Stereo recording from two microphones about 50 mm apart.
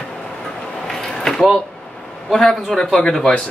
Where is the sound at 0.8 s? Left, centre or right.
Centre.